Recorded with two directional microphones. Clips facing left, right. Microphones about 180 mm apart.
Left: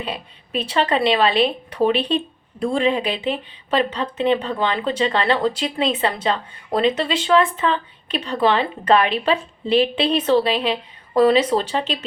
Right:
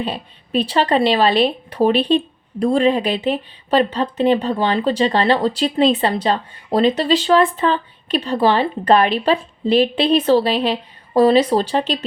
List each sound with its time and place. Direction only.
0.0 s a woman's voice: 30° right (ahead or behind)